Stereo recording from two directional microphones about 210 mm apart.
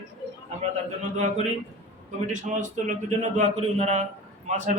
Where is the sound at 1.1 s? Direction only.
35° right (ahead or behind).